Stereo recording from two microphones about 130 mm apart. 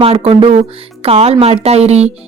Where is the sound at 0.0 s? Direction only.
45° right (ahead or behind).